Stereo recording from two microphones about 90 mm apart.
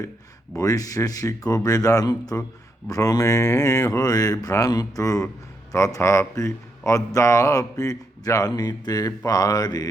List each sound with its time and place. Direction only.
0.5 s speech: 40° left (ahead or behind)